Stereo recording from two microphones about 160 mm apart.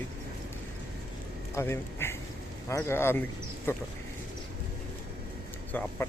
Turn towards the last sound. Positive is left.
turn(degrees=10)  # may be behind; listen again after turning